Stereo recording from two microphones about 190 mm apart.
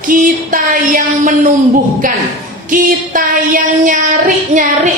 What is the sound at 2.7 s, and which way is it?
A woman's voice, 45° right (ahead or behind).